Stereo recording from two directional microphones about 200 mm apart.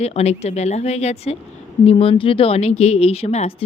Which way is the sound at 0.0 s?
30° left (ahead or behind).